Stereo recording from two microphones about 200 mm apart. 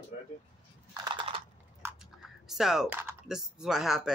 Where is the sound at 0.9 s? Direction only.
20° right (ahead or behind).